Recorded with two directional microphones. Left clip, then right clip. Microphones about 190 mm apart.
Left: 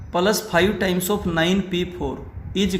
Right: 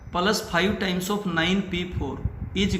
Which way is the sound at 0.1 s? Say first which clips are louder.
Left 4 dB; 40° left (ahead or behind).